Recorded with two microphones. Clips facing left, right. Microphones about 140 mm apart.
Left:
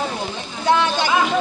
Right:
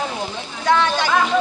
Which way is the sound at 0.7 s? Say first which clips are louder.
Even; 30° left (ahead or behind).